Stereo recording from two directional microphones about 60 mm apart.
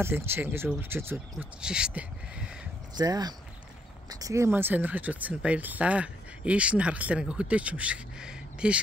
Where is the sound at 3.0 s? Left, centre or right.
Right.